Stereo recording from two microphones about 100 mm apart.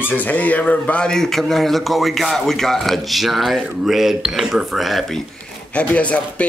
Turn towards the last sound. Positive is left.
turn(degrees=10)  # may be behind; listen again after turning